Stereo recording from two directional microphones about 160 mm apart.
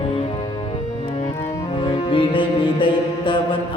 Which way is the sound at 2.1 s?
30° left (ahead or behind).